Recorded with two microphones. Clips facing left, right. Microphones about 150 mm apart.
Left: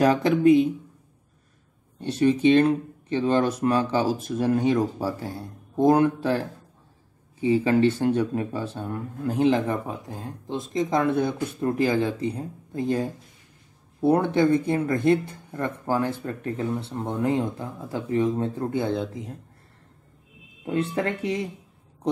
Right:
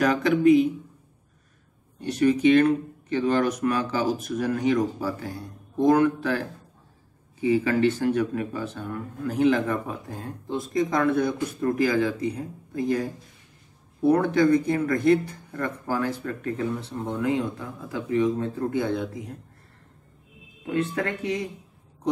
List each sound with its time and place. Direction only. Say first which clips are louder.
0.0 s speech: left 1 dB; 30° left (ahead or behind)
2.0 s speech: even; 25° left (ahead or behind)
7.4 s speech: left 1 dB; 30° left (ahead or behind)
20.6 s speech: left 1 dB; 30° left (ahead or behind)